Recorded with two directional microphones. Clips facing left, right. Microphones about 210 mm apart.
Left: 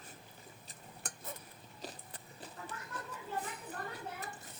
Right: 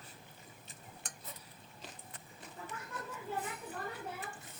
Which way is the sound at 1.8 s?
35° left (ahead or behind).